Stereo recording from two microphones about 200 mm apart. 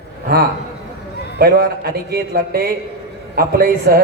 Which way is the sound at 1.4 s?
50° right (ahead or behind).